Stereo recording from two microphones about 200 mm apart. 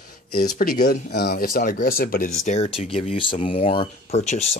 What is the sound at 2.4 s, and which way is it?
Speech, 30° left (ahead or behind).